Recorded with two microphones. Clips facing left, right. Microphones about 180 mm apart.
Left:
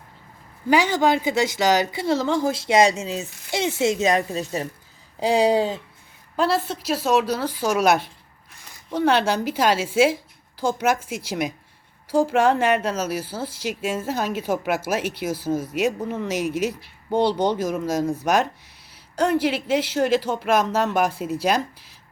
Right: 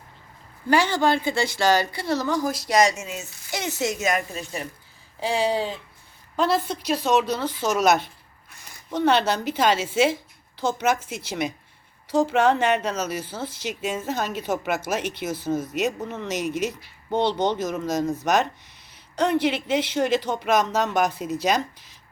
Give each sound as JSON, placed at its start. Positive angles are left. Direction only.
{"t": 0.7, "sound": "a woman's voice", "side_deg": 15}
{"t": 6.3, "sound": "speech", "side_deg": 5}